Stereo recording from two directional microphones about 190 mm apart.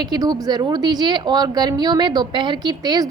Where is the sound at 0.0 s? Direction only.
20° right (ahead or behind).